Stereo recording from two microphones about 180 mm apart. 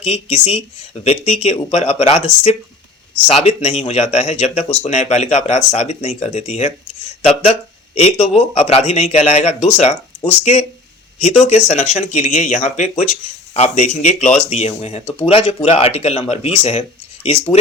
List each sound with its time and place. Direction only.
0.0 s speech: 35° left (ahead or behind)
7.9 s speech: 35° left (ahead or behind)